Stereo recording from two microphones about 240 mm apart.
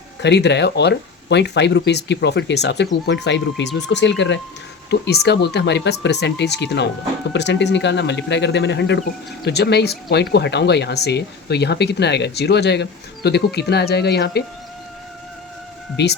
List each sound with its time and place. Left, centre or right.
0.2 s speech: left
16.0 s speech: left